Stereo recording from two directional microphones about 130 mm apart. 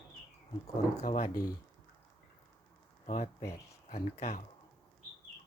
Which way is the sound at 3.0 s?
90° left.